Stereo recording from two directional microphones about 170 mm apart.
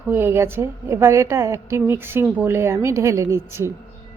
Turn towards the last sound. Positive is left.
turn(degrees=-15)  # may be behind; listen again after turning